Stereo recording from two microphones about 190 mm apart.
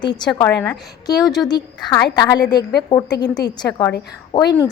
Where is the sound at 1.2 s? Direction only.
Centre (ahead or behind).